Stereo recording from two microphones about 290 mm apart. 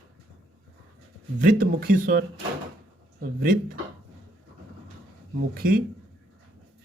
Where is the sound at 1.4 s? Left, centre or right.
Right.